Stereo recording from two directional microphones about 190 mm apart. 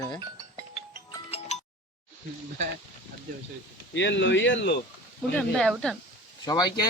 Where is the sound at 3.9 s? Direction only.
70° left (ahead or behind).